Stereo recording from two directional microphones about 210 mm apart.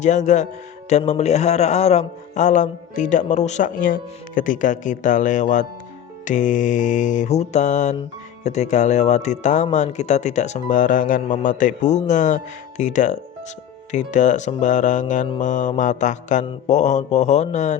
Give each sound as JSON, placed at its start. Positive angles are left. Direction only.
{"t": 0.0, "sound": "a man's voice", "side_deg": 35}